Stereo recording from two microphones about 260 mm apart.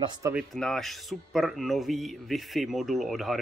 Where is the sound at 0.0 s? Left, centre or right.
Centre.